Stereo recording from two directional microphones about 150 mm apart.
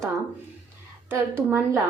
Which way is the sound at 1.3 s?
15° right (ahead or behind).